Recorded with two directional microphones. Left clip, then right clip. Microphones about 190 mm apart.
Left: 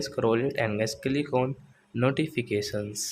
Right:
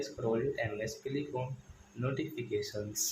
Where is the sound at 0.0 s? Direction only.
40° left (ahead or behind).